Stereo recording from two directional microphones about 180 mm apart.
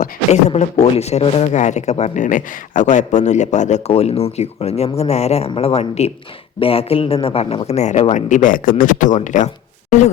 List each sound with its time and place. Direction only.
0.0 s speech: 40° left (ahead or behind)